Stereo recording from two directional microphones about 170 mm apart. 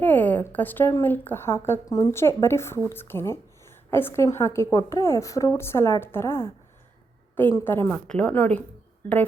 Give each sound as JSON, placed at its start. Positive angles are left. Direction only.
{"t": 0.0, "sound": "a woman's voice", "side_deg": 10}